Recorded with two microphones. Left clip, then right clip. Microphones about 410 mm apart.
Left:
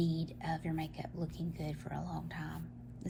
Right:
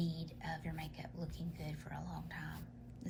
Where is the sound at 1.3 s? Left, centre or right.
Centre.